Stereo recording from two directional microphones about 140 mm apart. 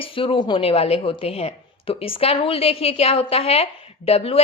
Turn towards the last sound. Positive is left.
turn(degrees=45)  # may be behind; listen again after turning